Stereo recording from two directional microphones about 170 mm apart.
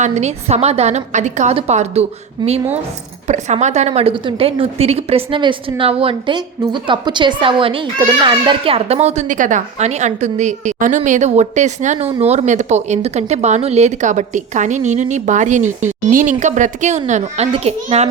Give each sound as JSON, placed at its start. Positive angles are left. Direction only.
{"t": 0.0, "sound": "a woman's voice", "side_deg": -40}